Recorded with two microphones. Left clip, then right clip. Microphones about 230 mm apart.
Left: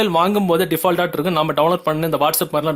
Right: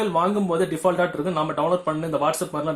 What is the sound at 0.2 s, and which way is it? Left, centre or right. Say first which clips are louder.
Speech: left 3 dB; left.